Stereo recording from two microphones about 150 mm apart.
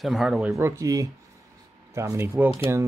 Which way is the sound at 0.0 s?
Centre (ahead or behind).